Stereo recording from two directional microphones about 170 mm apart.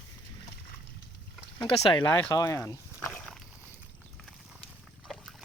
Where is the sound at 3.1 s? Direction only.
5° left (ahead or behind).